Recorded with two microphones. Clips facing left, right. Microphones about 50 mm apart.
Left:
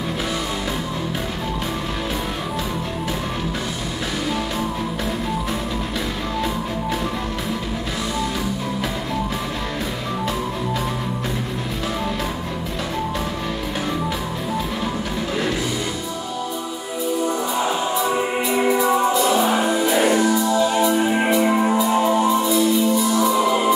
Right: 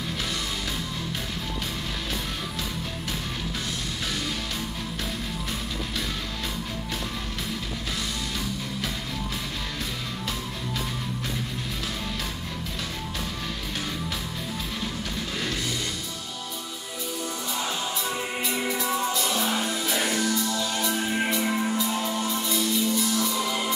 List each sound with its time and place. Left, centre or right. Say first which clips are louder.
17.2 s music: left 9 dB; centre
21.7 s music: left 10 dB; centre